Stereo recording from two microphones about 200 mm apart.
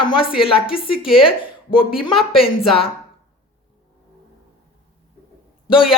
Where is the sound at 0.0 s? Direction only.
25° left (ahead or behind).